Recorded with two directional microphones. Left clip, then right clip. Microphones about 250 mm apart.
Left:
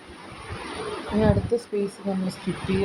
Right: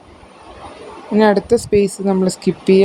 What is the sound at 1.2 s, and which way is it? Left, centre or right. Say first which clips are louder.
A woman's voice: right 11 dB; right.